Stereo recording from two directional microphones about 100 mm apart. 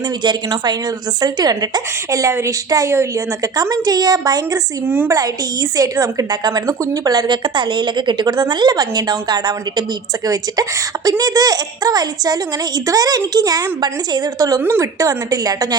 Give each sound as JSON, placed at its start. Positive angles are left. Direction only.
{"t": 0.2, "sound": "a woman's voice", "side_deg": -45}